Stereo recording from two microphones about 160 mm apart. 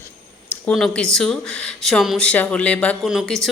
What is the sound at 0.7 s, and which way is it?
A woman's voice, 5° left (ahead or behind).